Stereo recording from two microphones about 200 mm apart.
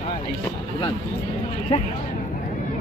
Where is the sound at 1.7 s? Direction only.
30° left (ahead or behind).